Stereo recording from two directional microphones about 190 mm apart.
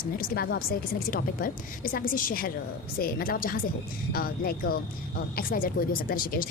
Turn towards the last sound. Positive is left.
turn(degrees=50)  # may be behind; listen again after turning